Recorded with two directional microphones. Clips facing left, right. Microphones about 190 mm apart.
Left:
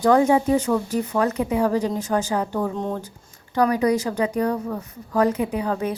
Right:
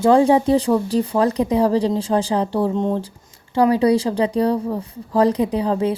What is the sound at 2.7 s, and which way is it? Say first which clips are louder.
A woman's voice: right 6 dB; 20° right (ahead or behind).